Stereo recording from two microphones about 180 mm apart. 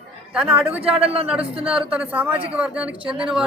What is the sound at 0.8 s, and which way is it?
Speech, 30° right (ahead or behind).